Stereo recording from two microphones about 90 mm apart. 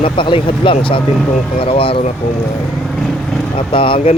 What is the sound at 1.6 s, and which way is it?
Speech, 90° left.